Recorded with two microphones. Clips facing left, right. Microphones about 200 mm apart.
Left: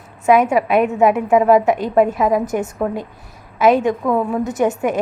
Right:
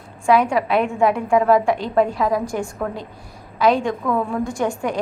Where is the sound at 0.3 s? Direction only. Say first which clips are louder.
Left 3 dB; 20° left (ahead or behind).